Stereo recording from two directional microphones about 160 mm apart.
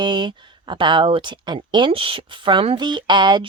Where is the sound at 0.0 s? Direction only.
30° right (ahead or behind).